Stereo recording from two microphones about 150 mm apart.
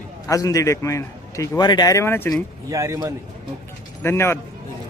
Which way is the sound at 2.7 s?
20° right (ahead or behind).